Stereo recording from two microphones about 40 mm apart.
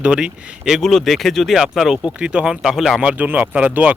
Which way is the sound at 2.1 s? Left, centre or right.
Right.